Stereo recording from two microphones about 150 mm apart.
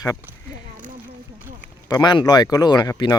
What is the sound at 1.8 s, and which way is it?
Speech, 30° left (ahead or behind).